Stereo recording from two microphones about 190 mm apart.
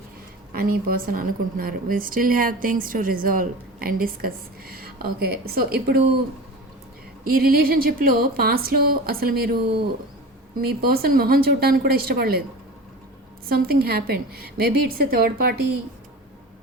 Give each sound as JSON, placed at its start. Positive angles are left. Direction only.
{"t": 0.5, "sound": "a woman's voice", "side_deg": -50}
{"t": 7.3, "sound": "a woman's voice", "side_deg": -50}
{"t": 10.6, "sound": "a woman's voice", "side_deg": -55}
{"t": 13.5, "sound": "a woman's voice", "side_deg": -55}